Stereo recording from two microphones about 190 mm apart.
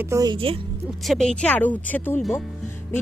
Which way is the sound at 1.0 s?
Centre (ahead or behind).